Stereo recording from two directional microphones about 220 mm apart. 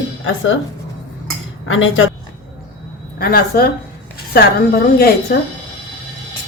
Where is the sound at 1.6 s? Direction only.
65° left (ahead or behind).